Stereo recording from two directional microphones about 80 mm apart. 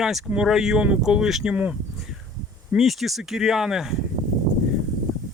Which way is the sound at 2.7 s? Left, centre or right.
Centre.